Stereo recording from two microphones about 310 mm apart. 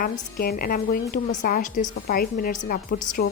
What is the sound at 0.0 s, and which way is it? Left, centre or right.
A woman's voice, left.